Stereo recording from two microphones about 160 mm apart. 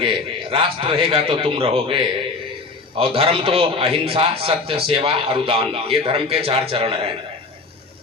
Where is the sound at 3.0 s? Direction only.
35° right (ahead or behind).